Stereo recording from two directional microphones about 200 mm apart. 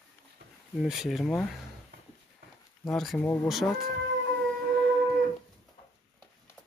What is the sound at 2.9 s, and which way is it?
Speech, centre (ahead or behind).